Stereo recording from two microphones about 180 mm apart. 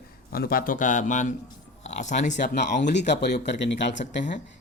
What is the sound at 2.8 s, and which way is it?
Speech, 75° left (ahead or behind).